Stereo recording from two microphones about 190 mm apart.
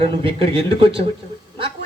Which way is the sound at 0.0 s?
30° right (ahead or behind).